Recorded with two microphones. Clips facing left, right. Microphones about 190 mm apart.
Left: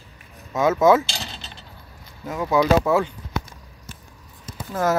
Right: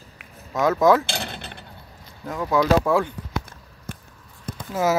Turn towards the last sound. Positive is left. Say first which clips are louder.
# even
turn(degrees=0)  # may be behind; listen again after turning